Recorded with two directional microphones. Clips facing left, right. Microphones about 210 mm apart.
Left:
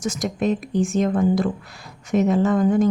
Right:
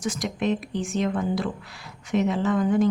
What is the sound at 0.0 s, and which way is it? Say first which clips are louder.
A woman's voice: left 3 dB; 45° left (ahead or behind).